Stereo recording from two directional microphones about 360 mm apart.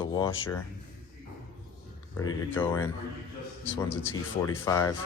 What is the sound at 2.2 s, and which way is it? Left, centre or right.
Speech, centre.